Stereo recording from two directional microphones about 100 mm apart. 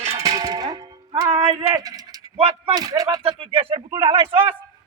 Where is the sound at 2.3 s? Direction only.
65° right (ahead or behind).